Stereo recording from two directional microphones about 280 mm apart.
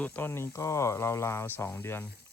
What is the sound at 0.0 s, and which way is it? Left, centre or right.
Speech, centre.